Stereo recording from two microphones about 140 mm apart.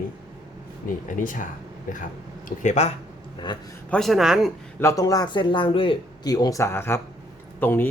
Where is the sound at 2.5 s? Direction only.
55° left (ahead or behind).